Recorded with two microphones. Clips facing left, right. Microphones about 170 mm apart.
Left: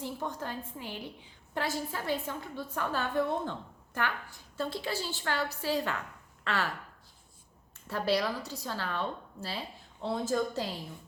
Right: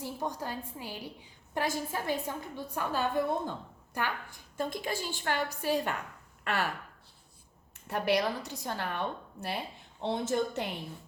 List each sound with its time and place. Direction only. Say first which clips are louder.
0.0 s a woman's voice: right 1 dB; 15° right (ahead or behind)
7.9 s a woman's voice: right 1 dB; 20° right (ahead or behind)